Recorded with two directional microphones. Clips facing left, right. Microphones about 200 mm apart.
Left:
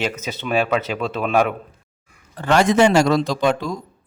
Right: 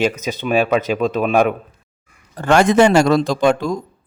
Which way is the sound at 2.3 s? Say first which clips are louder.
Right 3 dB; 50° right (ahead or behind).